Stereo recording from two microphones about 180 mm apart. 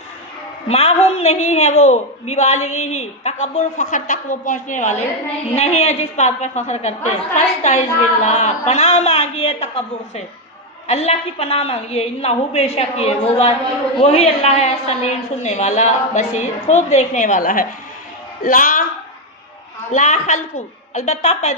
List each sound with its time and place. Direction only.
0.7 s a woman's voice: 35° left (ahead or behind)
10.8 s a woman's voice: 35° left (ahead or behind)
19.9 s a woman's voice: 40° left (ahead or behind)